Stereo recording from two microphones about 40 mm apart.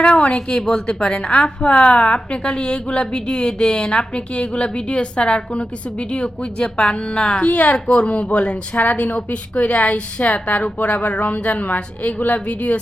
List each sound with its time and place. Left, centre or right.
0.0 s a sound: left
0.6 s a woman's voice: centre
7.4 s a woman's voice: left